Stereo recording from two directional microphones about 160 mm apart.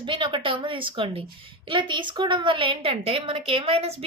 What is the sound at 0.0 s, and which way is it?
A woman's voice, 30° right (ahead or behind).